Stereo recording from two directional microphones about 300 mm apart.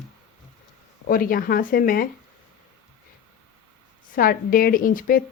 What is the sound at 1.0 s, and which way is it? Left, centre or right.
Speech, left.